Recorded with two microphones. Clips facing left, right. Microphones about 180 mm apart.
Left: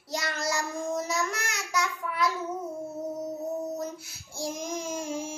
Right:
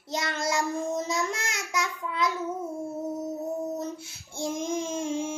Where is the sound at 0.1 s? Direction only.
25° right (ahead or behind).